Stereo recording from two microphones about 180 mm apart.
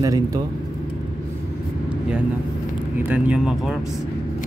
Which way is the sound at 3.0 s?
10° right (ahead or behind).